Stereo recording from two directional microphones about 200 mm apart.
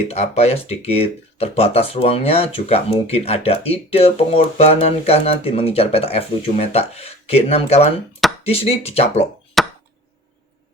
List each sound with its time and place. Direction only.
0.1 s speech: 30° left (ahead or behind)
9.6 s chop: centre (ahead or behind)